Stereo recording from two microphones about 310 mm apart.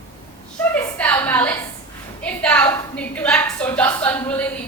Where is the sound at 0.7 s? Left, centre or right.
Centre.